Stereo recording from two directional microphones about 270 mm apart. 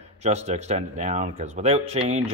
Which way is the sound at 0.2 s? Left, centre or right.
Right.